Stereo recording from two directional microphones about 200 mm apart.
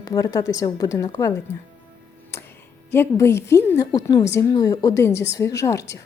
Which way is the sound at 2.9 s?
10° left (ahead or behind).